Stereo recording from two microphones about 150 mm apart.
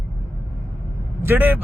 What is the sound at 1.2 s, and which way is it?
Speech, 15° right (ahead or behind).